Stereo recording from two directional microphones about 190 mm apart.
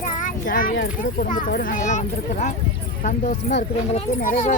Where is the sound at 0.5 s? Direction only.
45° left (ahead or behind).